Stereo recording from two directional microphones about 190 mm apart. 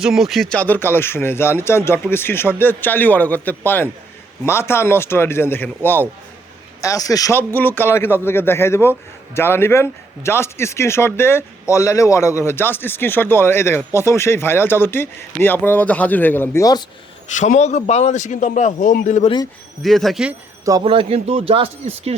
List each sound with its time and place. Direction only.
0.0 s speech: centre (ahead or behind); by 16.8 s 15° left (ahead or behind)
17.3 s a man's voice: 40° left (ahead or behind)
19.8 s speech: centre (ahead or behind)
20.8 s speech: 30° right (ahead or behind)